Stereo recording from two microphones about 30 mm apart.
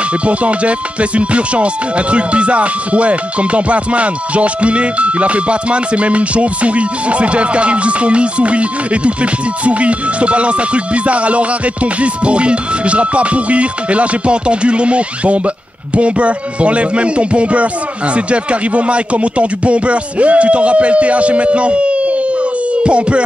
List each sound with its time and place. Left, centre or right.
0.2 s music: right